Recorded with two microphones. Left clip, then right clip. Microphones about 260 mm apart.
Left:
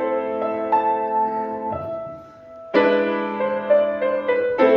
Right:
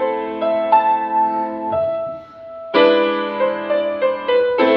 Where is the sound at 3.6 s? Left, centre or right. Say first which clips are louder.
Even; centre.